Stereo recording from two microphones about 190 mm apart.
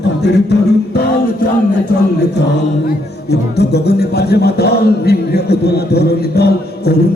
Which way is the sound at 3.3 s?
60° left (ahead or behind).